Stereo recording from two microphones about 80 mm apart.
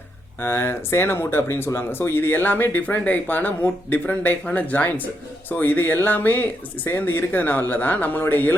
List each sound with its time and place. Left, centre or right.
0.4 s speech: left